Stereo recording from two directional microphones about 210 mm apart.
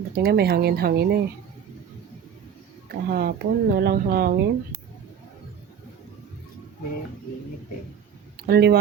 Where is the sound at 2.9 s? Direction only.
45° right (ahead or behind).